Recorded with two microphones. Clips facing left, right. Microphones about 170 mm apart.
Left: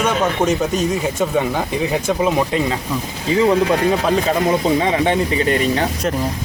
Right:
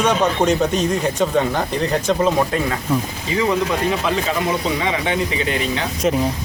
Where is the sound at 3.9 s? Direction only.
40° left (ahead or behind).